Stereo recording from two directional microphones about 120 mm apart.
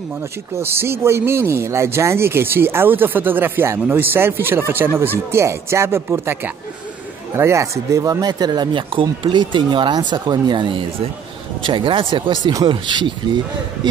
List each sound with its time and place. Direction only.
0.6 s speech: 20° right (ahead or behind); by 13.1 s 40° right (ahead or behind)